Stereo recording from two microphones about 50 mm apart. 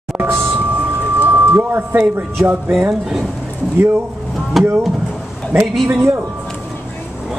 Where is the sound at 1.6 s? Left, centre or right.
Right.